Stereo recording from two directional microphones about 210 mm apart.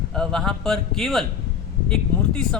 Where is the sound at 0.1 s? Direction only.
Centre (ahead or behind).